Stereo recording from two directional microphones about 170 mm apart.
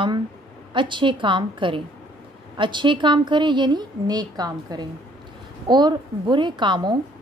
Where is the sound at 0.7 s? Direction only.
30° right (ahead or behind).